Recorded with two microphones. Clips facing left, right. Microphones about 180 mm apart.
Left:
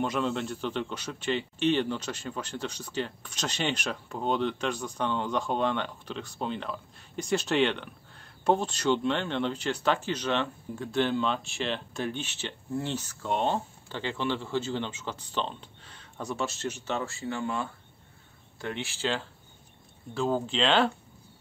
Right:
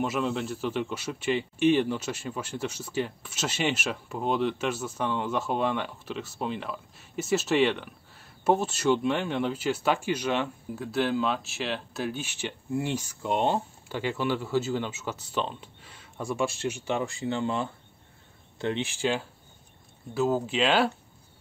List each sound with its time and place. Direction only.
0.0 s speech: 5° right (ahead or behind)